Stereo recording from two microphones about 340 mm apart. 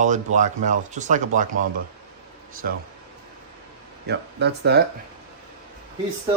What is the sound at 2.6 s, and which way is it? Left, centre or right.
Speech, right.